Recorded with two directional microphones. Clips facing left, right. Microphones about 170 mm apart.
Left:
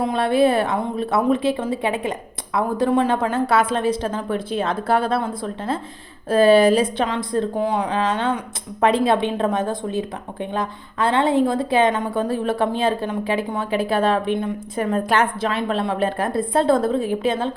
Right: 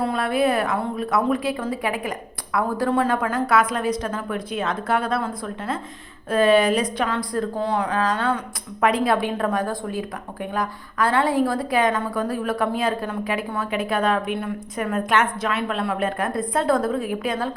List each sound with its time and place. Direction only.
0.0 s a woman's voice: 25° left (ahead or behind); by 7.9 s 10° left (ahead or behind)
7.9 s a woman's voice: 25° left (ahead or behind)